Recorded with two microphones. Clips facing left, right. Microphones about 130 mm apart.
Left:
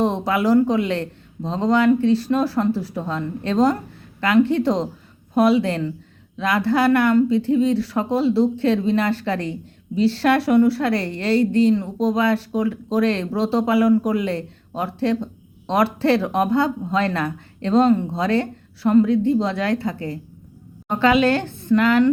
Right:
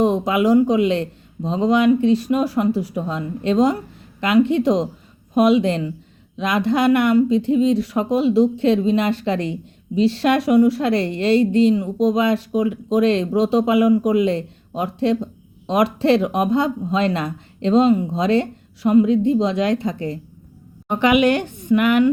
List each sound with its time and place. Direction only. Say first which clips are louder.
0.0 s a woman's voice: right 3 dB; 15° right (ahead or behind)